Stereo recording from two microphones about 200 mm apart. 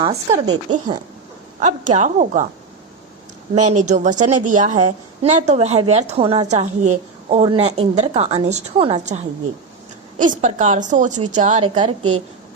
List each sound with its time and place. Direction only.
0.0 s speech: 25° right (ahead or behind)
1.5 s a woman's voice: 35° right (ahead or behind)
3.5 s a woman's voice: 35° right (ahead or behind)
11.7 s speech: 25° right (ahead or behind)